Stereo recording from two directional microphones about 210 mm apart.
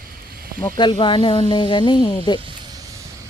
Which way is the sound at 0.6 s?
20° left (ahead or behind).